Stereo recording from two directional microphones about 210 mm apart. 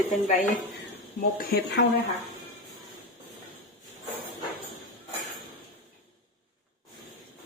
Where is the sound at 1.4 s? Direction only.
50° left (ahead or behind).